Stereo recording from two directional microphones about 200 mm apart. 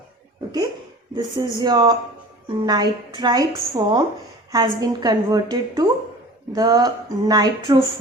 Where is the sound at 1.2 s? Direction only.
20° right (ahead or behind).